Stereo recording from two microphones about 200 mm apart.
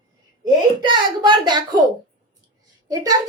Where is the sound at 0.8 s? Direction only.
20° right (ahead or behind).